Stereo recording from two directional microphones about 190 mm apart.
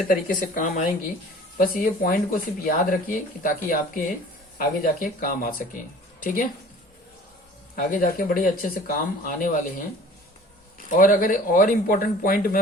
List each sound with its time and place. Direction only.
0.1 s speech: 45° left (ahead or behind)
7.8 s speech: 50° left (ahead or behind)